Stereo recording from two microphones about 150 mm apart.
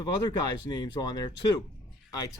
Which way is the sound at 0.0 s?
25° left (ahead or behind).